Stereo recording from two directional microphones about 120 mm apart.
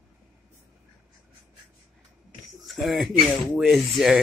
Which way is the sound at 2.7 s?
Centre (ahead or behind).